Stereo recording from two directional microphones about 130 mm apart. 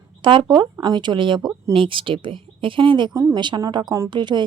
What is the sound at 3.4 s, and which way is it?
Speech, 35° right (ahead or behind).